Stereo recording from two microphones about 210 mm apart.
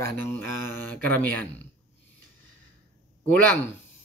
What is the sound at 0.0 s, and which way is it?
Speech, 10° left (ahead or behind).